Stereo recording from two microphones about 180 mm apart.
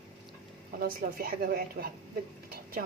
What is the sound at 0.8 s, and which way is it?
A woman's voice, 55° right (ahead or behind).